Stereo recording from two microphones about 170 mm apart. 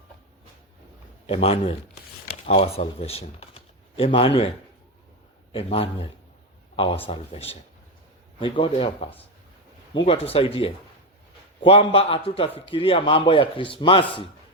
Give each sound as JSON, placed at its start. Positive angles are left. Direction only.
{"t": 1.3, "sound": "speech", "side_deg": 35}
{"t": 5.5, "sound": "speech", "side_deg": 35}
{"t": 7.1, "sound": "speech", "side_deg": 35}